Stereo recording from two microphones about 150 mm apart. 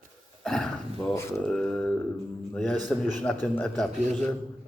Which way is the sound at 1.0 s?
20° left (ahead or behind).